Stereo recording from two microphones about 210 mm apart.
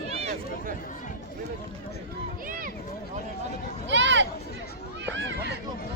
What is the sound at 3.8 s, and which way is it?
Speech, 60° right (ahead or behind).